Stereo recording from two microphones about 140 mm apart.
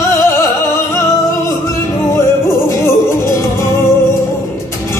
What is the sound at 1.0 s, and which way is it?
Music, 20° left (ahead or behind).